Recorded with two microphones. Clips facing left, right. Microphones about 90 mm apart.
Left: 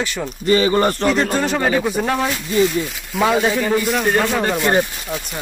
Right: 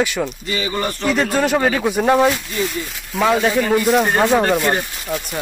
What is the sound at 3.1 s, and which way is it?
Speech, 5° left (ahead or behind).